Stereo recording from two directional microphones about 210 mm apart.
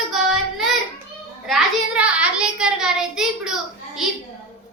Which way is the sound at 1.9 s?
5° right (ahead or behind).